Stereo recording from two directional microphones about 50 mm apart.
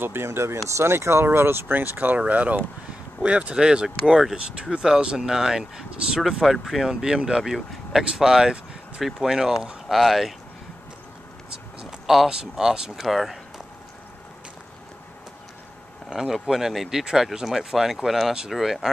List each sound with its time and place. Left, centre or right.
0.0 s speech: right
2.0 s speech: right; by 10.3 s centre
11.8 s a sound: centre
12.3 s speech: centre
16.1 s speech: centre